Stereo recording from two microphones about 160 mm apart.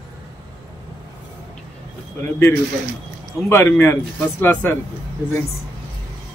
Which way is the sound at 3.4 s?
15° left (ahead or behind).